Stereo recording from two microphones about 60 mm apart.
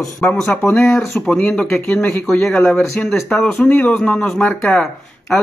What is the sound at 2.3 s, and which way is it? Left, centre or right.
Speech, centre.